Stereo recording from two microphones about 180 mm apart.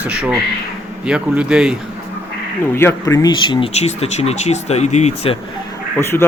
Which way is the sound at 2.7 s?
15° left (ahead or behind).